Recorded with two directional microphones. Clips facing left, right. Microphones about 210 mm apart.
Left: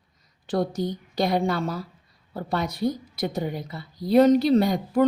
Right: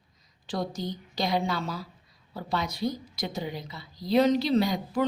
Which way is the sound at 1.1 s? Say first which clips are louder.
Left 5 dB; 55° left (ahead or behind).